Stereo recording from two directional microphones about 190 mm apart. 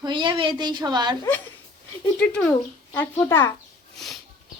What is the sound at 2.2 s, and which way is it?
A woman's voice, 5° left (ahead or behind).